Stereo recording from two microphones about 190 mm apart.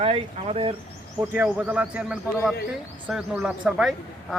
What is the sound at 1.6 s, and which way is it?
A man's voice, 5° right (ahead or behind).